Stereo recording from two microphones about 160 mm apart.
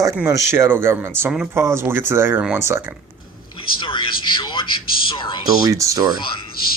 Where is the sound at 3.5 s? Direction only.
30° left (ahead or behind).